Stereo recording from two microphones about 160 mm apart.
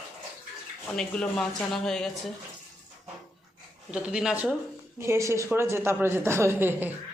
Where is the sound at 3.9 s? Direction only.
5° right (ahead or behind).